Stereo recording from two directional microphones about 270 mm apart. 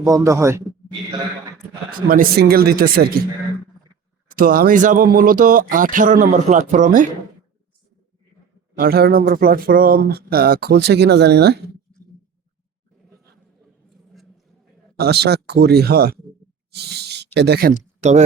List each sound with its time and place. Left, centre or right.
0.0 s speech: centre
1.9 s speech: right
4.3 s speech: right
8.8 s speech: right
14.9 s speech: right